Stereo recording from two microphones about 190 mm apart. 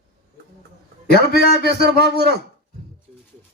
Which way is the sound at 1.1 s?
55° left (ahead or behind).